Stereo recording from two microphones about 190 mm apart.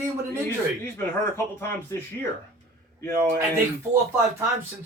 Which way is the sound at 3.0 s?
15° left (ahead or behind).